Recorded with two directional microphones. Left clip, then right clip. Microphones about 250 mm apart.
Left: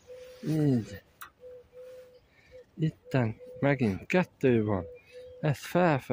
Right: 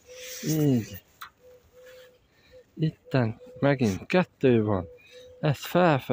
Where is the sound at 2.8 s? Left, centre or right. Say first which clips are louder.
Right 3 dB; centre.